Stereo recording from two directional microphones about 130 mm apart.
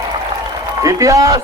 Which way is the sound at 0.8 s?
25° right (ahead or behind).